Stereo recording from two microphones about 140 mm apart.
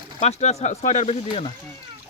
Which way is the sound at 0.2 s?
50° left (ahead or behind).